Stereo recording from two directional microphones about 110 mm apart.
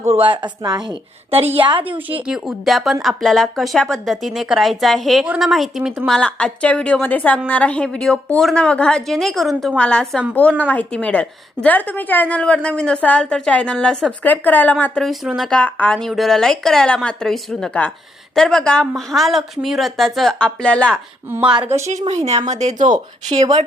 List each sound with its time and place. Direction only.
0.2 s a woman's voice: 45° right (ahead or behind)
1.3 s a woman's voice: 60° right (ahead or behind)
2.2 s a woman's voice: 5° right (ahead or behind); by 15.0 s 15° left (ahead or behind)
15.0 s speech: centre (ahead or behind)
21.4 s a woman's voice: 10° right (ahead or behind)
22.0 s speech: 70° right (ahead or behind)
22.4 s speech: 90° right
23.3 s speech: 70° right (ahead or behind)